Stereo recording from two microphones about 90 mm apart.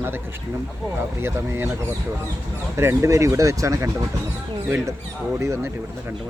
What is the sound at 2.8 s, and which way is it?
Speech, 30° right (ahead or behind).